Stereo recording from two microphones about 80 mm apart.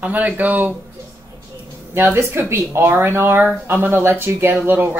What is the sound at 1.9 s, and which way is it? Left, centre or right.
Speech, right.